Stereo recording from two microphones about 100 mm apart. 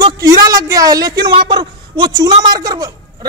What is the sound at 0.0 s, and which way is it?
A man's voice, 40° right (ahead or behind).